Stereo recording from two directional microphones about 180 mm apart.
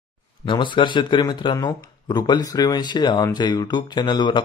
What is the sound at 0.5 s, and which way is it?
Speech, 25° left (ahead or behind).